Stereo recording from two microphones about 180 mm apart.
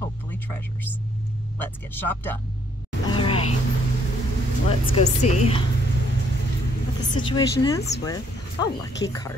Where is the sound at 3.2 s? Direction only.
30° left (ahead or behind).